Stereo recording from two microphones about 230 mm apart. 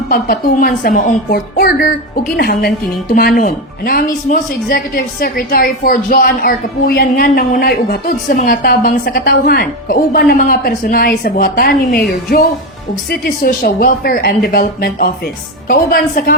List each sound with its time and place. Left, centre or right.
0.1 s a woman's voice: left
13.1 s a woman's voice: left